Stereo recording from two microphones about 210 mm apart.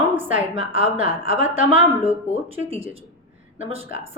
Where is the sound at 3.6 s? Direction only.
25° right (ahead or behind).